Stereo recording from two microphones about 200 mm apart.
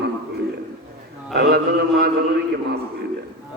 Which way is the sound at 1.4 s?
55° right (ahead or behind).